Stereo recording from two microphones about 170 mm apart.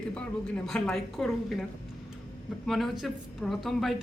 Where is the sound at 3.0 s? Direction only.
Centre (ahead or behind).